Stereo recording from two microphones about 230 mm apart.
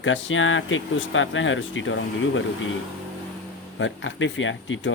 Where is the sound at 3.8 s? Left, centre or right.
Left.